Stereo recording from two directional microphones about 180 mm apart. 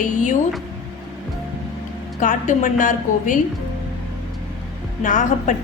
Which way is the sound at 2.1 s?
45° left (ahead or behind).